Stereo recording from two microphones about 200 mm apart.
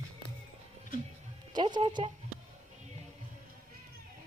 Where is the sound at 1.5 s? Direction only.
20° right (ahead or behind).